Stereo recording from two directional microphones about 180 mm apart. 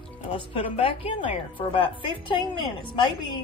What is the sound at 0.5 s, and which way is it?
A woman's voice, 30° left (ahead or behind).